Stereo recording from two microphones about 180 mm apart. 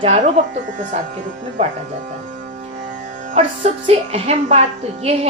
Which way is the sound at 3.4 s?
35° right (ahead or behind).